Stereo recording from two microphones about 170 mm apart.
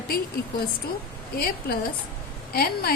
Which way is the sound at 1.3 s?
60° left (ahead or behind).